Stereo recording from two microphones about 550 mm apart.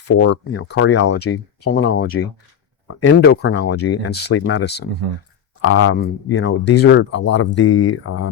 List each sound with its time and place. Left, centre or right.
0.2 s speech: centre